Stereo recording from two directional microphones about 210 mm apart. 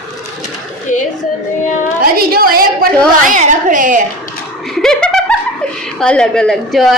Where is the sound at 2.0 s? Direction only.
45° right (ahead or behind).